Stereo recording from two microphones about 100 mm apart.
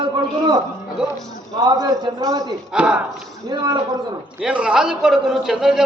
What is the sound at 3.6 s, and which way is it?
Speech, 45° right (ahead or behind).